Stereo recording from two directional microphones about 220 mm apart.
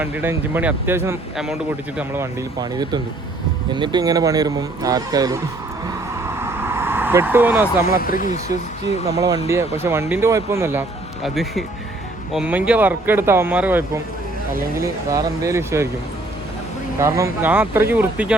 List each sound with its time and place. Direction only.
0.0 s speech: 10° right (ahead or behind)
6.2 s vehicle: 10° right (ahead or behind)
7.9 s speech: 40° left (ahead or behind)
9.0 s speech: 15° right (ahead or behind)
17.0 s speech: 15° right (ahead or behind)